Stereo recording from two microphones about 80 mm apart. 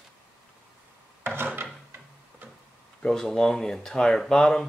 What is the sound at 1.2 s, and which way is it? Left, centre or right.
Filing, right.